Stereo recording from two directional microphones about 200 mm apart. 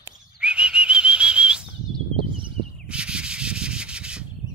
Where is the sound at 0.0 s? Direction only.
5° right (ahead or behind).